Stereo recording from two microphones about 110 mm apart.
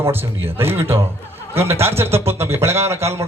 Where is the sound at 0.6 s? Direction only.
20° right (ahead or behind).